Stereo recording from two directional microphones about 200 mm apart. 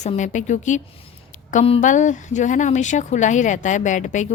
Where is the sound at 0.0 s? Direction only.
35° left (ahead or behind).